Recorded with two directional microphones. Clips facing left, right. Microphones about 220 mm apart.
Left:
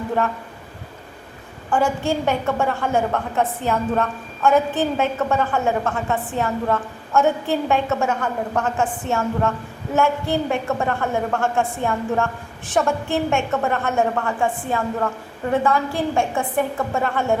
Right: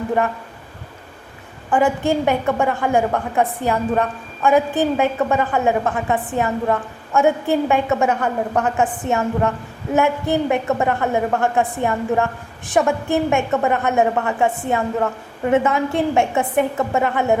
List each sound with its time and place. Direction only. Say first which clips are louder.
1.7 s a woman's voice: right 3 dB; 15° right (ahead or behind)